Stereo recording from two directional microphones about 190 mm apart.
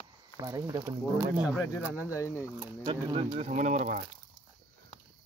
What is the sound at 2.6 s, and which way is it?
Speech, 25° right (ahead or behind).